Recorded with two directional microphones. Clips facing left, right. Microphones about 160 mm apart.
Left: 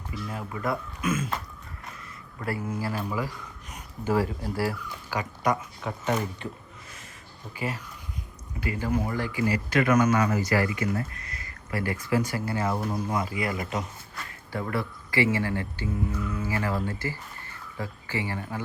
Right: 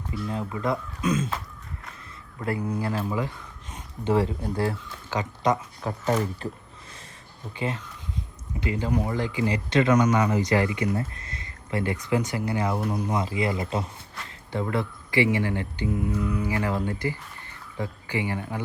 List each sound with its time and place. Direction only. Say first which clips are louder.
0.1 s speech: right 4 dB; 20° right (ahead or behind)
2.4 s speech: right 3 dB; 20° right (ahead or behind)
5.8 s speech: right 3 dB; 35° right (ahead or behind)
7.6 s speech: right 2 dB; 25° right (ahead or behind)